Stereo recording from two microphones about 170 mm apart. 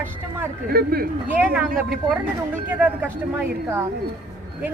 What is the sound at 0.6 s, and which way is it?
Speech, 65° right (ahead or behind).